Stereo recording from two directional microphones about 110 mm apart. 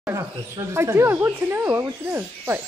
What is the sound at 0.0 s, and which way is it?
Speech, 25° right (ahead or behind).